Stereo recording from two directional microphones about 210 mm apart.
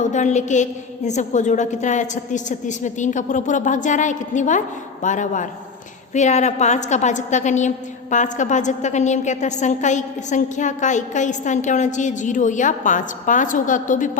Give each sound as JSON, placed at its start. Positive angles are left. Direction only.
{"t": 0.0, "sound": "a woman's voice", "side_deg": 35}